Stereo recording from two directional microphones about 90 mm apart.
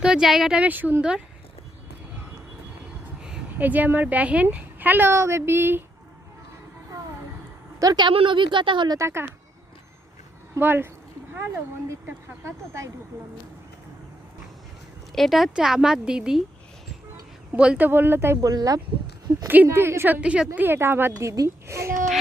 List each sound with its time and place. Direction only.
0.0 s speech: 5° right (ahead or behind)
0.7 s speech: 20° right (ahead or behind)
3.6 s speech: 20° right (ahead or behind)
7.8 s a woman's voice: 45° right (ahead or behind)
8.0 s speech: 75° right (ahead or behind)
9.0 s speech: 30° right (ahead or behind)
10.6 s speech: 25° right (ahead or behind)
15.1 s speech: centre (ahead or behind)
17.6 s speech: 15° right (ahead or behind)
18.3 s speech: 45° right (ahead or behind)
19.5 s speech: 25° right (ahead or behind)
20.2 s speech: 15° right (ahead or behind)
20.6 s speech: 25° right (ahead or behind)